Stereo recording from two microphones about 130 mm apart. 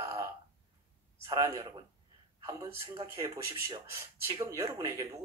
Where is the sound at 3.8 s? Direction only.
25° right (ahead or behind).